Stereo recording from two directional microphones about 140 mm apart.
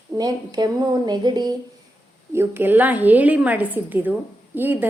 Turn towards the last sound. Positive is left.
turn(degrees=-15)  # may be behind; listen again after turning